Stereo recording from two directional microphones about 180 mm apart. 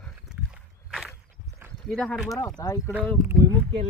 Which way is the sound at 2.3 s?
20° left (ahead or behind).